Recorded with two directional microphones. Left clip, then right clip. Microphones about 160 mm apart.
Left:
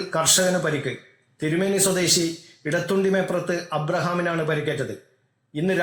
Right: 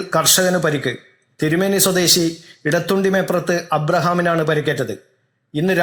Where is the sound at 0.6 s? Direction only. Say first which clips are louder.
Right 6 dB; 35° right (ahead or behind).